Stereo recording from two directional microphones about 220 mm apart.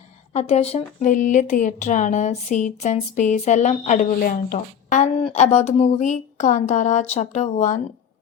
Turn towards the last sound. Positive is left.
turn(degrees=35)  # may be behind; listen again after turning